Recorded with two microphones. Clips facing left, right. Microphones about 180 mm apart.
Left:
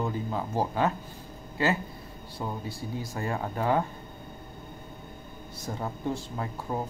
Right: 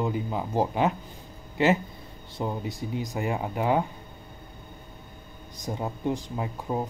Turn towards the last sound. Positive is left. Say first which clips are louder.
# right 3 dB
turn(degrees=-15)  # may be behind; listen again after turning